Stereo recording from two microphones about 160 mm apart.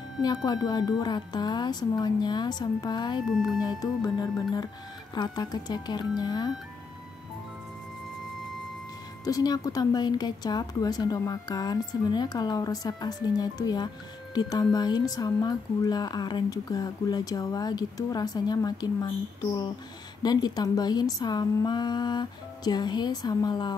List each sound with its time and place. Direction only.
0.2 s speech: 25° left (ahead or behind)
3.3 s speech: centre (ahead or behind)
3.6 s speech: 25° left (ahead or behind)
9.2 s speech: 25° left (ahead or behind)
20.2 s speech: 25° left (ahead or behind)